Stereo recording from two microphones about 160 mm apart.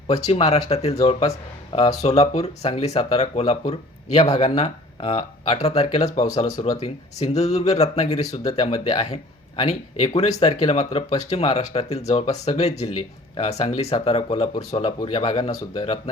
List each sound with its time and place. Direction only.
0.3 s speech: 40° left (ahead or behind)
8.4 s speech: 30° left (ahead or behind)